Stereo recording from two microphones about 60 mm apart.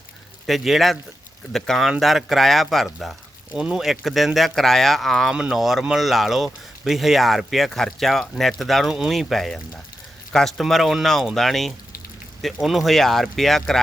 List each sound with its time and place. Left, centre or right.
0.4 s speech: centre
3.5 s speech: centre
5.3 s speech: centre
5.5 s speech: centre
8.9 s speech: centre
9.1 s speech: centre